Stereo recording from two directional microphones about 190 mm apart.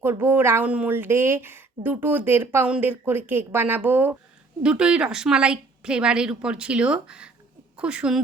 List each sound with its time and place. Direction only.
0.0 s a woman's voice: 10° right (ahead or behind)